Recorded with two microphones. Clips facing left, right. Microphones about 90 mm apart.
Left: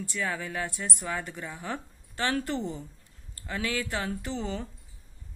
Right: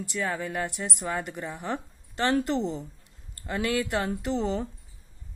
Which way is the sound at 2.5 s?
30° right (ahead or behind).